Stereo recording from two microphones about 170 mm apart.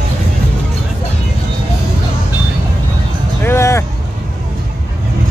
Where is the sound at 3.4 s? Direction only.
15° left (ahead or behind).